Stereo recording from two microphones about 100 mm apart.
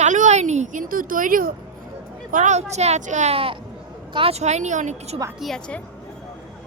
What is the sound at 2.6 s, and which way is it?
A woman's voice, 90° right.